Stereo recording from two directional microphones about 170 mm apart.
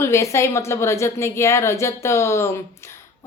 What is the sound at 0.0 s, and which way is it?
Speech, 15° left (ahead or behind).